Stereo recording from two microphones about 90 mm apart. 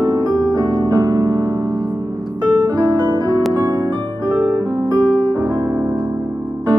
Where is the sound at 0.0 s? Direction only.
50° right (ahead or behind).